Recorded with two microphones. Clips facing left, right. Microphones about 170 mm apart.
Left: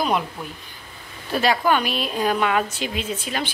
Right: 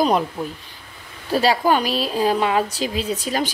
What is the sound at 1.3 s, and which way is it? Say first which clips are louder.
Speech: right 2 dB; 35° right (ahead or behind).